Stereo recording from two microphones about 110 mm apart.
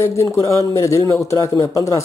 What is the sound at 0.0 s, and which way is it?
A man's voice, 25° left (ahead or behind).